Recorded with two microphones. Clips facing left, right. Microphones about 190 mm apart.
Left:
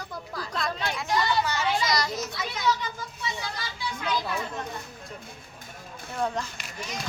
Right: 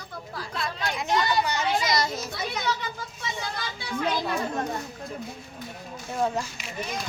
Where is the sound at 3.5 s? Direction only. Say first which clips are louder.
Right 2 dB; 60° right (ahead or behind).